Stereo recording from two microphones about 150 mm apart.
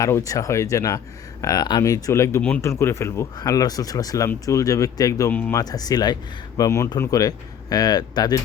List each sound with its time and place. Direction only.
0.0 s speech: 20° left (ahead or behind)
5.3 s speech: 10° left (ahead or behind)
5.5 s speech: 25° left (ahead or behind)